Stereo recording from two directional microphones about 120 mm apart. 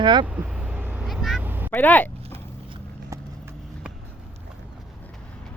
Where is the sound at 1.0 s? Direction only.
Centre (ahead or behind).